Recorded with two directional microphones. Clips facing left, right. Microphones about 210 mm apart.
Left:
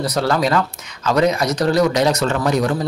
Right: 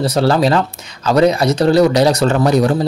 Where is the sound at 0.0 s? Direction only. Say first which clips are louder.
Right 5 dB; 30° right (ahead or behind).